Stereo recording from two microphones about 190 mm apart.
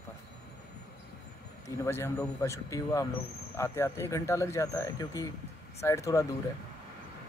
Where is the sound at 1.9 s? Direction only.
15° left (ahead or behind).